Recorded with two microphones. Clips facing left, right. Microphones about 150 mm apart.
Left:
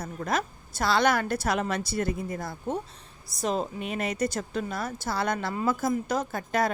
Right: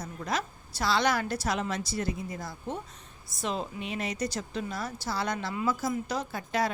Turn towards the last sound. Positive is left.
turn(degrees=50)  # may be behind; listen again after turning